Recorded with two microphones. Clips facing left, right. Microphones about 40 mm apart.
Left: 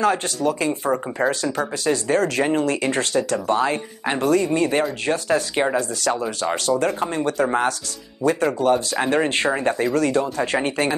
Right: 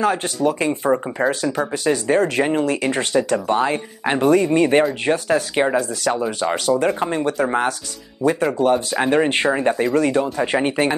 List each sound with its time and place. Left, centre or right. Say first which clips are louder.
0.0 s speech: right 1 dB; centre; by 4.8 s right
5.3 s speech: right 1 dB; centre